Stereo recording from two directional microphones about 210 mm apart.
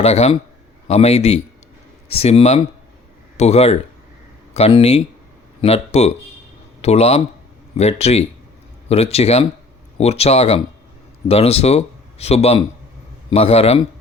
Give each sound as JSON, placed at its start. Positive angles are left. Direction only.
{"t": 0.0, "sound": "speech", "side_deg": 30}